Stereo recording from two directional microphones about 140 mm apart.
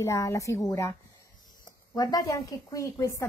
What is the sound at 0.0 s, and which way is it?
Speech, 20° left (ahead or behind).